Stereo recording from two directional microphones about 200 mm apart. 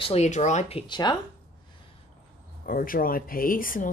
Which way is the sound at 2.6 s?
45° left (ahead or behind).